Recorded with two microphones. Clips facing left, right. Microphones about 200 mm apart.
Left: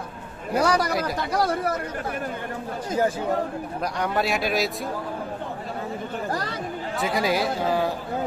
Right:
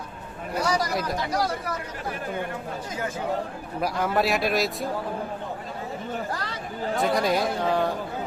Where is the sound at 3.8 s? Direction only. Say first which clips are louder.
Right 2 dB; 5° right (ahead or behind).